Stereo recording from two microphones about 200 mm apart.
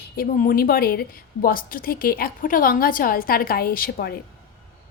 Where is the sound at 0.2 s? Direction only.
45° left (ahead or behind).